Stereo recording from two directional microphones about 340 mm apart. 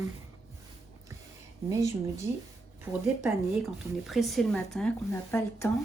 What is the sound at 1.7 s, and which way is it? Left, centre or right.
Speech, centre.